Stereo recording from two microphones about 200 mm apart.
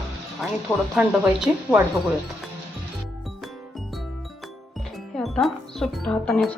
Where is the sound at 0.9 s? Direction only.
5° right (ahead or behind).